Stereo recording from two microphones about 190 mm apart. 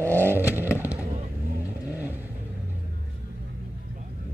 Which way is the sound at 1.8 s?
10° right (ahead or behind).